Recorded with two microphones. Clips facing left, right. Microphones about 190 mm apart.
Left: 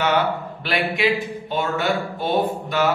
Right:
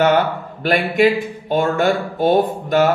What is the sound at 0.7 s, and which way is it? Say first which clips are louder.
Speech: right 6 dB; 45° right (ahead or behind).